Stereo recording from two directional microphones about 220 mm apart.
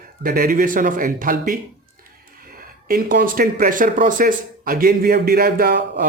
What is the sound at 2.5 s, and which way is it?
Speech, 40° right (ahead or behind).